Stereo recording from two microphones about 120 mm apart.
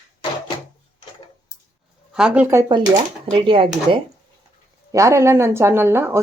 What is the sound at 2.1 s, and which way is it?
Speech, 10° right (ahead or behind).